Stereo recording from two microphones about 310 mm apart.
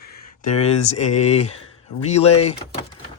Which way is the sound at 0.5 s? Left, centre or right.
Left.